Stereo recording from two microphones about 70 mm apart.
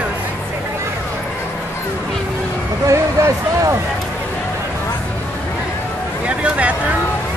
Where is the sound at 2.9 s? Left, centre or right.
Right.